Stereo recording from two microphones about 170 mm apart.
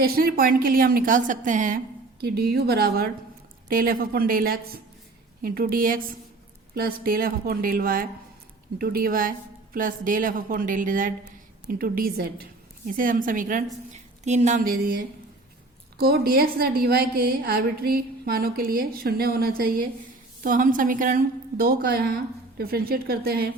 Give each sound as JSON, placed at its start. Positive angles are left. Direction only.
{"t": 0.0, "sound": "a woman's voice", "side_deg": -60}
{"t": 2.2, "sound": "a woman's voice", "side_deg": -65}
{"t": 16.0, "sound": "a woman's voice", "side_deg": -65}